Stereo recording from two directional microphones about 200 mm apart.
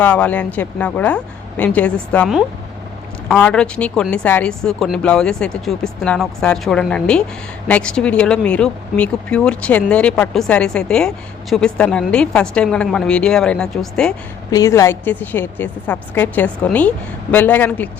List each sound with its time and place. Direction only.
0.0 s a woman's voice: 5° left (ahead or behind)
14.5 s a woman's voice: 15° left (ahead or behind)